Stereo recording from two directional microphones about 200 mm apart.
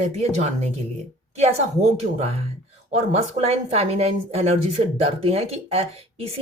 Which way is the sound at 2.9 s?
30° right (ahead or behind).